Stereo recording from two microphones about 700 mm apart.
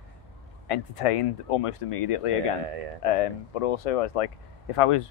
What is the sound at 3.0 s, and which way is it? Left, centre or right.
Speech, left.